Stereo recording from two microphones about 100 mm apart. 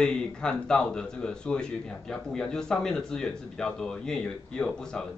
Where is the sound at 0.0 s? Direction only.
10° left (ahead or behind).